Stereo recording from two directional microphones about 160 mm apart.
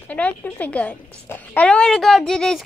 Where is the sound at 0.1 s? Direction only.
10° left (ahead or behind).